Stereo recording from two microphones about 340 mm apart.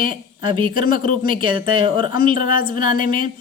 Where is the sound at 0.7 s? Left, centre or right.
Left.